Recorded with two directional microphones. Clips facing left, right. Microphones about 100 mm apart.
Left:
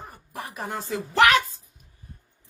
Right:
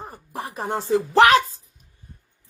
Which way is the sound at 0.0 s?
30° right (ahead or behind).